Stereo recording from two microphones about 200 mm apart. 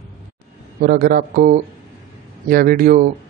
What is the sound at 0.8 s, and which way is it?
A man's voice, 50° right (ahead or behind).